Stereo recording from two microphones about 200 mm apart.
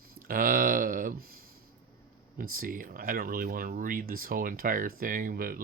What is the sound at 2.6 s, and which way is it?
Speech, 45° right (ahead or behind).